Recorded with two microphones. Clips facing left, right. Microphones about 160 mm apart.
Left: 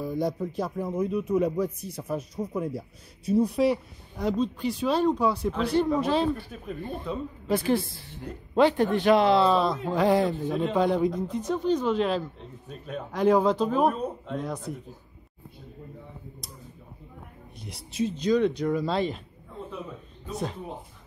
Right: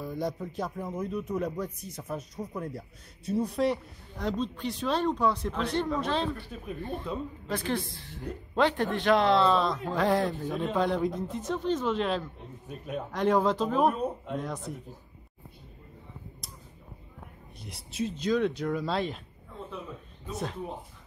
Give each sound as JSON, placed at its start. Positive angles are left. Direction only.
{"t": 0.0, "sound": "speech", "side_deg": 0}
{"t": 12.6, "sound": "a man's voice", "side_deg": -10}
{"t": 13.1, "sound": "speech", "side_deg": 0}
{"t": 17.6, "sound": "speech", "side_deg": 0}
{"t": 20.2, "sound": "speech", "side_deg": 0}